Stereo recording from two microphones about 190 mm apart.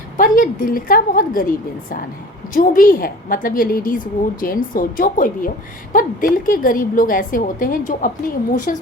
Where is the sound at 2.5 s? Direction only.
45° left (ahead or behind).